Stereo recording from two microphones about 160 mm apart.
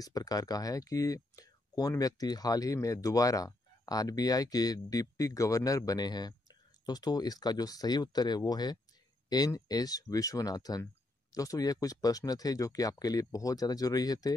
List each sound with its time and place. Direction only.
0.0 s speech: 25° left (ahead or behind)